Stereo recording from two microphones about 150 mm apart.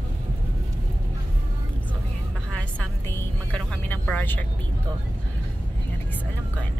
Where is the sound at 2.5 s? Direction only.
10° left (ahead or behind).